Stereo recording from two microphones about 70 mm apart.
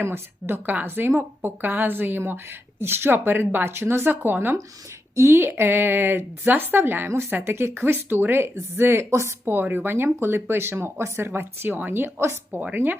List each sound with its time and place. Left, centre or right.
0.0 s a woman's voice: right
9.4 s a woman's voice: right